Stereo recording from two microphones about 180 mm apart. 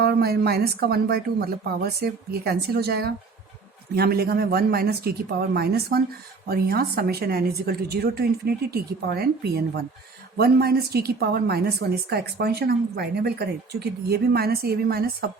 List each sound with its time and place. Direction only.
0.0 s a woman's voice: 60° right (ahead or behind)